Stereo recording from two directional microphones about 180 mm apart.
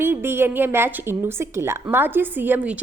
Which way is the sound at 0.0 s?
10° right (ahead or behind).